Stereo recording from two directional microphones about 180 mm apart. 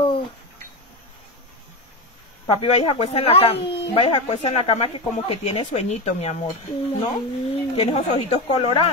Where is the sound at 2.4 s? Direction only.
30° left (ahead or behind).